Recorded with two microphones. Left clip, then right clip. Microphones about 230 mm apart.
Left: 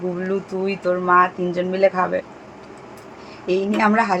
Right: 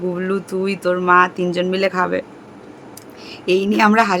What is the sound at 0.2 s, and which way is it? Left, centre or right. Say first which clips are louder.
A woman's voice: right 2 dB; right.